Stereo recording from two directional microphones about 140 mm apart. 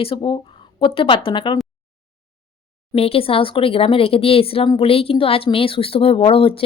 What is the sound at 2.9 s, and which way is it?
Speech, 45° left (ahead or behind).